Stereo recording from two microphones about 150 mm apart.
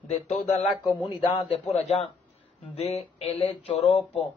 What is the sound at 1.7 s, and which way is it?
Speech, 45° left (ahead or behind).